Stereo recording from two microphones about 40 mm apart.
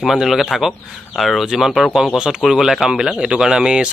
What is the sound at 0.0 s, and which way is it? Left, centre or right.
Speech, centre.